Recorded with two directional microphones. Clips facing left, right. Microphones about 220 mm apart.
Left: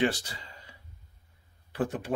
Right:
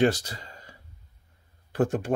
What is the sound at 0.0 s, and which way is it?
Speech, 40° right (ahead or behind).